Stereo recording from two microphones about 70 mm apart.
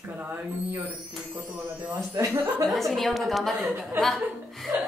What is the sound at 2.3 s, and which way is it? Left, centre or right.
Speech, right.